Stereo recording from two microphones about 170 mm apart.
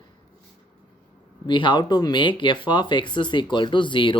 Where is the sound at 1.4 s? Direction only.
25° left (ahead or behind).